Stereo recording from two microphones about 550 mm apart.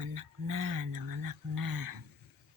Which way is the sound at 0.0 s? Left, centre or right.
Right.